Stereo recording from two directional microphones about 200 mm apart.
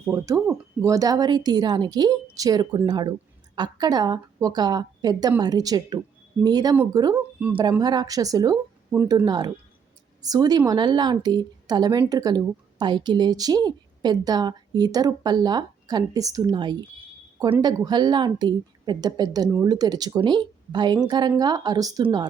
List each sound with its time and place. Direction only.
0.1 s speech: 15° right (ahead or behind)